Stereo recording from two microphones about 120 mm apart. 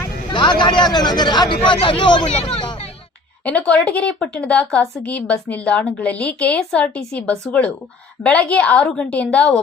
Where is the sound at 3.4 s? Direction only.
10° left (ahead or behind).